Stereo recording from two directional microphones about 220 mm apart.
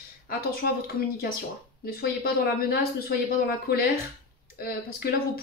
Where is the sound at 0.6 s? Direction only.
45° left (ahead or behind).